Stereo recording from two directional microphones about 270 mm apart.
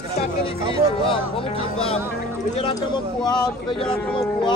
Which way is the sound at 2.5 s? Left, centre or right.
Centre.